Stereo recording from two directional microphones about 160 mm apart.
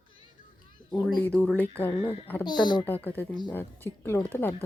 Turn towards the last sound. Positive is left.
turn(degrees=10)  # may be behind; listen again after turning